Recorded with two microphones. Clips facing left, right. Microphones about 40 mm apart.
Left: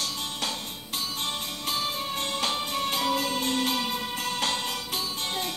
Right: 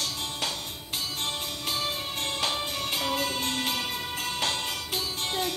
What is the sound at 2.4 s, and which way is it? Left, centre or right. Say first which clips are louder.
Music: left 2 dB; right.